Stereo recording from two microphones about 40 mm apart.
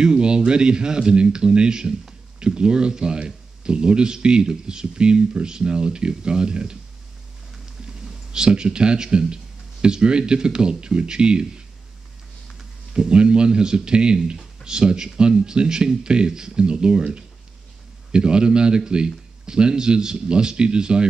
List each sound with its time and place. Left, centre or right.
0.0 s speech: right
8.0 s a man's voice: centre
12.9 s speech: right